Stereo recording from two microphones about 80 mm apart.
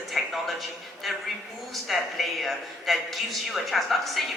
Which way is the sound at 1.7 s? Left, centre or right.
Centre.